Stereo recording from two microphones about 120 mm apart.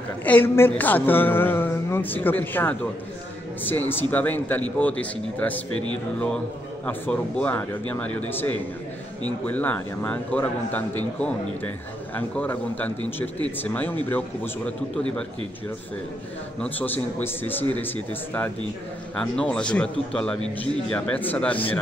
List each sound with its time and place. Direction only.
0.2 s a woman's voice: 15° left (ahead or behind)
6.9 s a woman's voice: 10° left (ahead or behind)
16.6 s a woman's voice: 15° left (ahead or behind)